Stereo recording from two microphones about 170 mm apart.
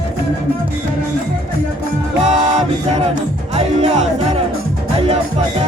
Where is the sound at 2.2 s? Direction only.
40° right (ahead or behind).